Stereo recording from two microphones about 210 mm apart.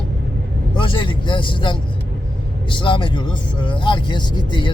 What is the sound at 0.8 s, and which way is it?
A man's voice, 25° left (ahead or behind).